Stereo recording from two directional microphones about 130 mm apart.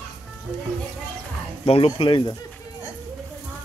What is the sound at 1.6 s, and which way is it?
Speech, 45° left (ahead or behind).